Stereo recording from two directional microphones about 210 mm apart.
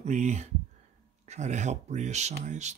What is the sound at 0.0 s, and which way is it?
Speech, 35° right (ahead or behind).